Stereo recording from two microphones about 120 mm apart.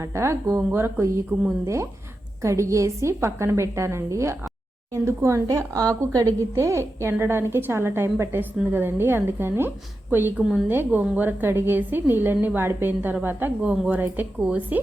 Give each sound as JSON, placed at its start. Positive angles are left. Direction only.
{"t": 0.0, "sound": "a woman's voice", "side_deg": -25}